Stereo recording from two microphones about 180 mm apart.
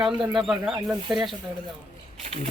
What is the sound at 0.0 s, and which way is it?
Speech, 5° right (ahead or behind).